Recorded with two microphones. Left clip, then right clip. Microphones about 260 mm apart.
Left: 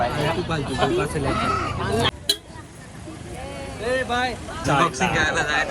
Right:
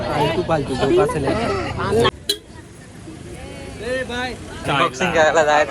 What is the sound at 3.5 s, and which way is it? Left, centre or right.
Vehicle, centre.